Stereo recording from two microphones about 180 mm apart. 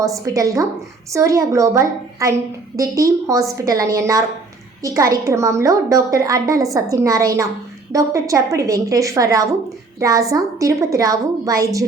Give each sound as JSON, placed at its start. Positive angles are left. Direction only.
{"t": 0.0, "sound": "a woman's voice", "side_deg": -20}